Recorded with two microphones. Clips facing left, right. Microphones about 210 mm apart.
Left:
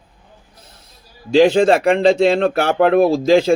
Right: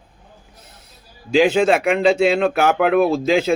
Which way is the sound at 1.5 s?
35° left (ahead or behind).